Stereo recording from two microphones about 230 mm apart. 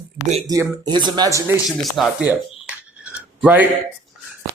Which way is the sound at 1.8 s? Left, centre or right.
Centre.